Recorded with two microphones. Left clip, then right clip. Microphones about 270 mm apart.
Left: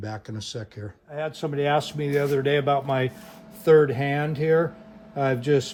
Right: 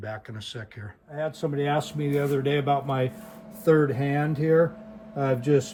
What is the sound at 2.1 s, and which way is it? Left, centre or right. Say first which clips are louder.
Speech: left 3 dB; left.